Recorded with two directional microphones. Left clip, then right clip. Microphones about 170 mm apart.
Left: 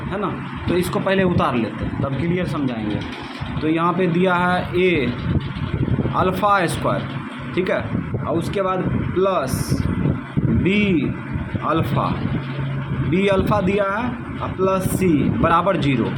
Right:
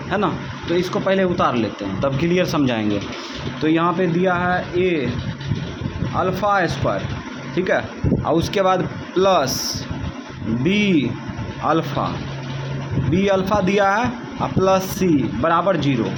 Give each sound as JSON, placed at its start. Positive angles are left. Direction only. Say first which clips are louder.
{"t": 0.8, "sound": "a man's voice", "louder": "right 1 dB", "side_deg": 0}
{"t": 2.3, "sound": "speech", "louder": "right 6 dB", "side_deg": -30}
{"t": 3.6, "sound": "a man's voice", "louder": "right 1 dB", "side_deg": -15}
{"t": 4.0, "sound": "a man's voice", "louder": "left 1 dB", "side_deg": 5}
{"t": 6.1, "sound": "a man's voice", "louder": "left 1 dB", "side_deg": 0}
{"t": 8.3, "sound": "speech", "louder": "right 4 dB", "side_deg": -25}
{"t": 10.6, "sound": "a man's voice", "louder": "right 2 dB", "side_deg": -10}
{"t": 13.1, "sound": "a man's voice", "louder": "even", "side_deg": -5}